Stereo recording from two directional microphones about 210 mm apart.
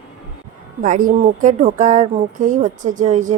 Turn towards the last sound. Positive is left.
turn(degrees=-35)  # may be behind; listen again after turning